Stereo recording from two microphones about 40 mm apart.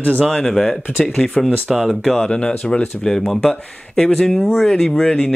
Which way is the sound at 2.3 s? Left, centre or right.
Left.